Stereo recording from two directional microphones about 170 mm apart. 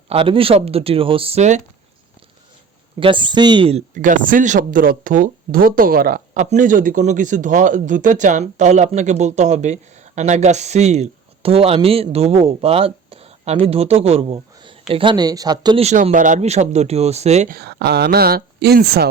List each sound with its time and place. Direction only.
0.1 s speech: 30° right (ahead or behind)
3.0 s speech: 30° right (ahead or behind)
15.8 s speech: 40° right (ahead or behind)
17.6 s speech: 75° right (ahead or behind)